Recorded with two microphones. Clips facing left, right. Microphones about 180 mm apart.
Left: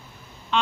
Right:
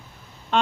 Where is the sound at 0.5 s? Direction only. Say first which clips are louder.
Right 2 dB; 50° right (ahead or behind).